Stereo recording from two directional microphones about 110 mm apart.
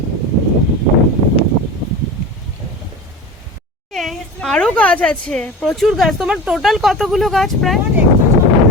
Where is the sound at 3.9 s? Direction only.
Centre (ahead or behind).